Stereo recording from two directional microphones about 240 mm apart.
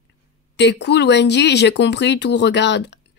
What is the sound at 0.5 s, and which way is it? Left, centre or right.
Speech, left.